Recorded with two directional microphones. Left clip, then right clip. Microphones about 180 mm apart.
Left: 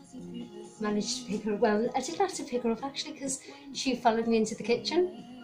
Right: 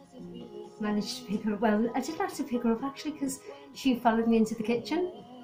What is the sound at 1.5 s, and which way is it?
Speech, 5° left (ahead or behind).